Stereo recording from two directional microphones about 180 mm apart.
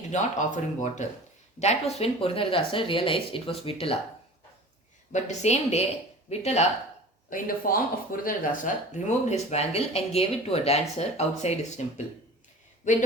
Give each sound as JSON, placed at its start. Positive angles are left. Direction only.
{"t": 0.1, "sound": "speech", "side_deg": 40}
{"t": 5.1, "sound": "speech", "side_deg": 40}
{"t": 7.3, "sound": "speech", "side_deg": 50}